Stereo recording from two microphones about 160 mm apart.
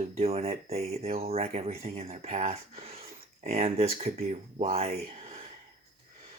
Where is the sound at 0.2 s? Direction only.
40° right (ahead or behind).